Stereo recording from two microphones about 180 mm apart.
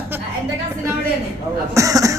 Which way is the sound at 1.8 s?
20° right (ahead or behind).